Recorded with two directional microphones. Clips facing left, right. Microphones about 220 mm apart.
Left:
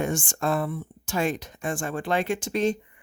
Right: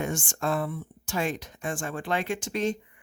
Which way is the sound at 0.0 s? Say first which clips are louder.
Left 3 dB; 40° left (ahead or behind).